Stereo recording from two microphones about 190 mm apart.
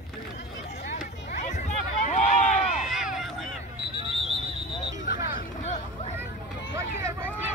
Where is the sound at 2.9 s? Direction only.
Centre (ahead or behind).